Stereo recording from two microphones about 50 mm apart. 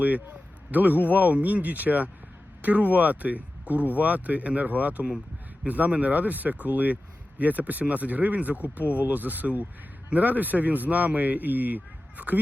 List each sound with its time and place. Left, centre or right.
0.7 s speech: right